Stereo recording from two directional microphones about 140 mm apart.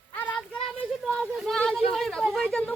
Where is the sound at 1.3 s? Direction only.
Centre (ahead or behind).